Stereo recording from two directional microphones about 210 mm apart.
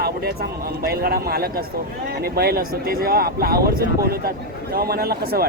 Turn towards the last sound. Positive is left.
turn(degrees=-45)  # may be behind; listen again after turning